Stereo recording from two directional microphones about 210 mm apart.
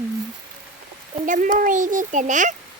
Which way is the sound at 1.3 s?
40° right (ahead or behind).